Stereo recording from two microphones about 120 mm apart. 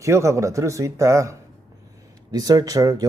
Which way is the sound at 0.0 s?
25° right (ahead or behind).